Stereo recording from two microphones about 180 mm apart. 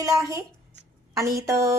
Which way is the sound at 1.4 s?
15° right (ahead or behind).